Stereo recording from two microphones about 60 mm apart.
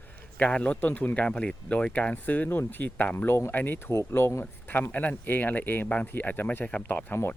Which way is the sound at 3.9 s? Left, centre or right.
Left.